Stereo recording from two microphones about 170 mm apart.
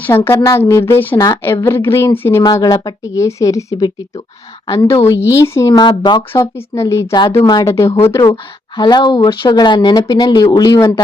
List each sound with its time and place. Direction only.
0.3 s a woman's voice: 15° left (ahead or behind)